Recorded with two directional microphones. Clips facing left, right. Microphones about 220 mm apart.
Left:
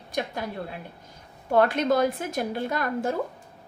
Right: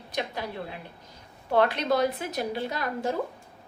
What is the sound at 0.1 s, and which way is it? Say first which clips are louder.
Speech: left 2 dB; 50° left (ahead or behind).